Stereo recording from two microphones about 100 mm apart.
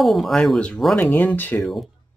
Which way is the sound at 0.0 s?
Centre (ahead or behind).